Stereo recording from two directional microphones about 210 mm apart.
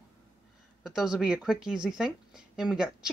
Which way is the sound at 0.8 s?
5° right (ahead or behind).